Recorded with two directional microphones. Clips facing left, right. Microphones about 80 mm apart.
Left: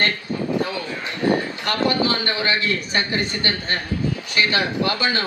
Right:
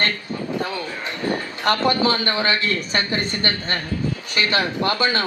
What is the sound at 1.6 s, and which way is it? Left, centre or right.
Speech, right.